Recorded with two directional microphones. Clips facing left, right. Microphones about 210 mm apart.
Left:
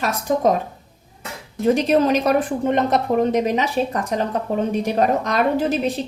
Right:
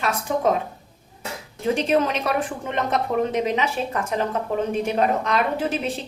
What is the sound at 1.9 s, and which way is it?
A woman's voice, 40° left (ahead or behind).